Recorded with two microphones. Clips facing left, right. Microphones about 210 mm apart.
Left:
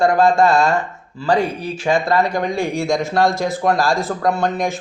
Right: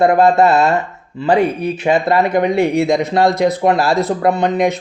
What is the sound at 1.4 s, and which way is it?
Speech, 65° right (ahead or behind).